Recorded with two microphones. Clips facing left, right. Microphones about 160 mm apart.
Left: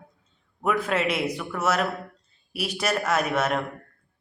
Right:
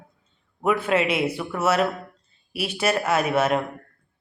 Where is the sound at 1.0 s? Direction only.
30° right (ahead or behind).